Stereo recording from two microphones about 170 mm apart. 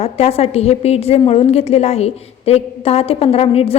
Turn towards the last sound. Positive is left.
turn(degrees=35)  # may be behind; listen again after turning